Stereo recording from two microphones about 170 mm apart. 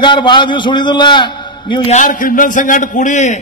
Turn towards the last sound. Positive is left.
turn(degrees=45)  # may be behind; listen again after turning